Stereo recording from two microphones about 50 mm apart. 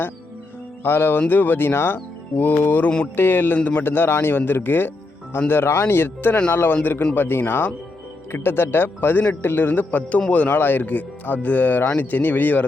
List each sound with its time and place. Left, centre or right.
0.9 s speech: left